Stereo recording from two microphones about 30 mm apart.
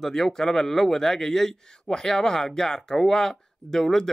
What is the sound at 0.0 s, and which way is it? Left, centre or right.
Speech, centre.